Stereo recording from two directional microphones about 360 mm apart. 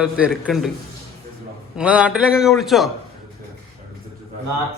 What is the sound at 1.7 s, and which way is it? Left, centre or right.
A man's voice, centre.